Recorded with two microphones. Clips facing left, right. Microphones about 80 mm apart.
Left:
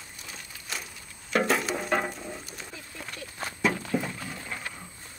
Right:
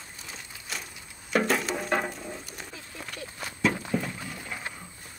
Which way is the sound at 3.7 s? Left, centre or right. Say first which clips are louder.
Left 1 dB; centre.